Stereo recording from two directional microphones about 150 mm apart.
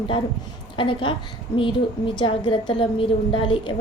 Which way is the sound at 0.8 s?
35° left (ahead or behind).